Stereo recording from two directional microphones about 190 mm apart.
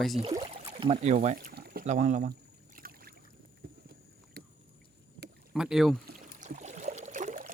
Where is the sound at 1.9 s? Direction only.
40° right (ahead or behind).